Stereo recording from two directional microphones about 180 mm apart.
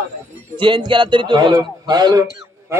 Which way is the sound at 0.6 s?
25° right (ahead or behind).